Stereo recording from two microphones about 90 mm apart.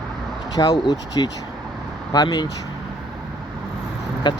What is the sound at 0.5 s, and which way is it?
Speech, 50° left (ahead or behind).